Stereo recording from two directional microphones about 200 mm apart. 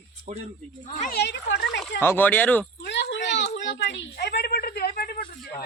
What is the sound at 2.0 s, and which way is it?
Speech, 10° left (ahead or behind).